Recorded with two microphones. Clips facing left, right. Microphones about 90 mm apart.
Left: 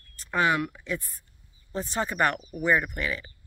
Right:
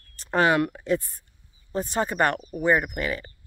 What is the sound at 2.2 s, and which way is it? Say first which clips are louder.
Speech: right 2 dB; 40° right (ahead or behind).